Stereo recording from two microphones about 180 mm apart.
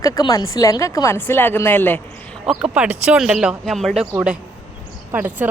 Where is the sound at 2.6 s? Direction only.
5° right (ahead or behind).